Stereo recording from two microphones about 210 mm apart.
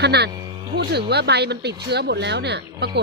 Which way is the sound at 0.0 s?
50° right (ahead or behind).